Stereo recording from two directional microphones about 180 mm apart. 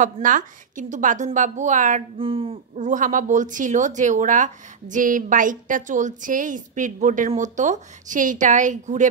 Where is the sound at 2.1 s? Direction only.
30° right (ahead or behind).